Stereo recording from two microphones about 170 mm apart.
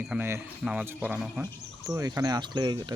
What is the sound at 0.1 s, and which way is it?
Speech, 10° right (ahead or behind).